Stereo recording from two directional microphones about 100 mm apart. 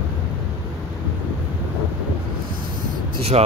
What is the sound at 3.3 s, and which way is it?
Speech, 90° right.